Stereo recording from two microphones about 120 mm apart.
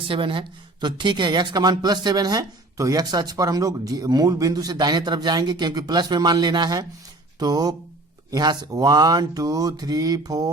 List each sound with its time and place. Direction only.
0.1 s speech: 45° right (ahead or behind)